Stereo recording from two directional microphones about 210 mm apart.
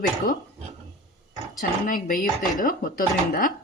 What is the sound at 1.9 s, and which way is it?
Speech, 40° left (ahead or behind).